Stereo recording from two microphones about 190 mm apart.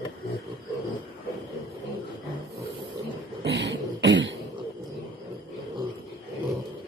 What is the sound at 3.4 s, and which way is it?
Throat clearing, 65° right (ahead or behind).